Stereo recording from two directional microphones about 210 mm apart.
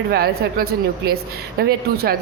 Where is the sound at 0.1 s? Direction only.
45° right (ahead or behind).